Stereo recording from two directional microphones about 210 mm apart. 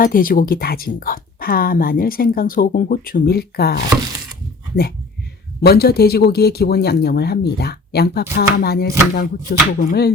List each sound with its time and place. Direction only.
0.0 s speech: 40° left (ahead or behind)
5.6 s speech: 50° left (ahead or behind)